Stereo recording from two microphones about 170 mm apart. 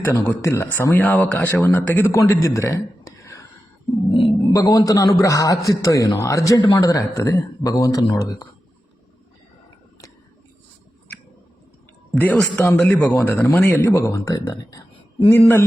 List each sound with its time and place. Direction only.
0.0 s speech: 10° left (ahead or behind)
4.5 s a man's voice: 20° left (ahead or behind)
12.2 s speech: 10° left (ahead or behind)